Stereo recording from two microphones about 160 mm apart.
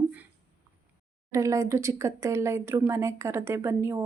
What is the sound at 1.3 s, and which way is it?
Speech, 20° right (ahead or behind).